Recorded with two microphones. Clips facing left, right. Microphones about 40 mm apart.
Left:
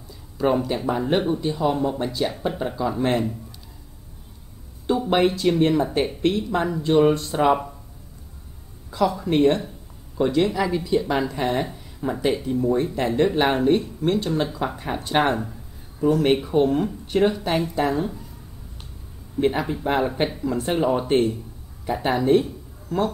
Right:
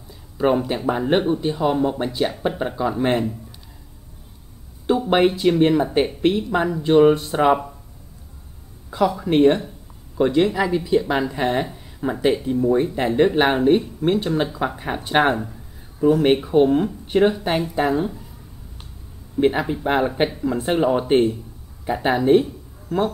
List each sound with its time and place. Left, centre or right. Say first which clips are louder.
0.4 s speech: right 2 dB; centre
4.8 s speech: right 2 dB; centre
8.9 s speech: right 2 dB; centre
19.4 s speech: right 3 dB; centre